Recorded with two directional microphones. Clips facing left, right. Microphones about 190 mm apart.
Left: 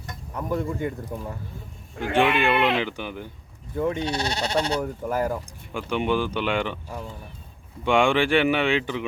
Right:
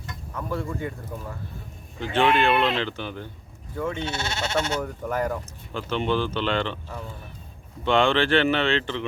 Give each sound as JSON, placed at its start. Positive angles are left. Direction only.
{"t": 0.3, "sound": "speech", "side_deg": 20}
{"t": 4.0, "sound": "speech", "side_deg": 35}
{"t": 4.8, "sound": "speech", "side_deg": 5}